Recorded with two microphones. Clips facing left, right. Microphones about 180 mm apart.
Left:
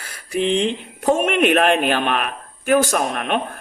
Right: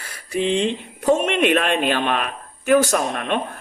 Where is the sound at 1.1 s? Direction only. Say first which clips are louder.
Left 1 dB; 55° left (ahead or behind).